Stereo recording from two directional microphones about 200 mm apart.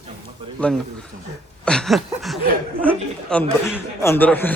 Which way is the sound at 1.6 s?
Centre (ahead or behind).